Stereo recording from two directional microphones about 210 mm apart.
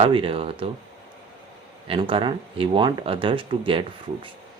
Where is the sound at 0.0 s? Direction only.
25° right (ahead or behind).